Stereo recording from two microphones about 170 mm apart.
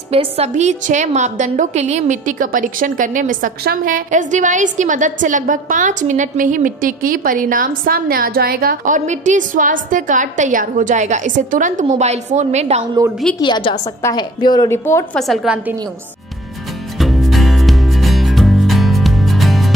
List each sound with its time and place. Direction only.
0.1 s a woman's voice: 35° right (ahead or behind)
0.5 s a woman's voice: 45° right (ahead or behind)
13.4 s a woman's voice: 30° left (ahead or behind)
14.7 s a woman's voice: 15° left (ahead or behind)
15.1 s a woman's voice: centre (ahead or behind)
17.0 s music: centre (ahead or behind)